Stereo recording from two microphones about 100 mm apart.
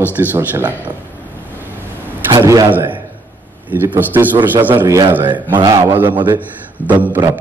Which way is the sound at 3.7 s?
20° right (ahead or behind).